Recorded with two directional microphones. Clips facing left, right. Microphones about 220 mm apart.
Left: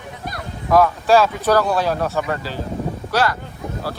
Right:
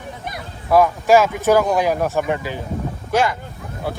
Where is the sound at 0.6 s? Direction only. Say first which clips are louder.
Right 1 dB; 10° right (ahead or behind).